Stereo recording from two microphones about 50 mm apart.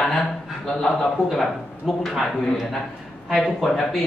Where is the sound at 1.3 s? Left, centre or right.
Centre.